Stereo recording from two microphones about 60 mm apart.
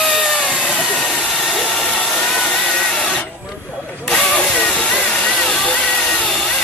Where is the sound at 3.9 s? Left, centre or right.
Centre.